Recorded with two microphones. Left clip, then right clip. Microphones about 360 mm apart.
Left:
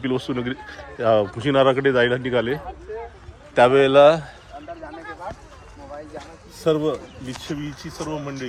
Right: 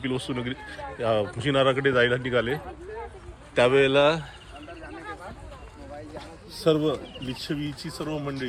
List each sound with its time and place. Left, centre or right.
0.0 s a man's voice: centre
3.5 s a man's voice: left
6.6 s speech: centre